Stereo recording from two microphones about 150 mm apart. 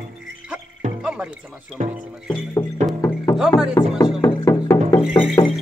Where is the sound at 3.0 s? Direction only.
25° left (ahead or behind).